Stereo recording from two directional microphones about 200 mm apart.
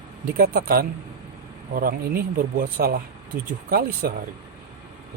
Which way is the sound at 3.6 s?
50° right (ahead or behind).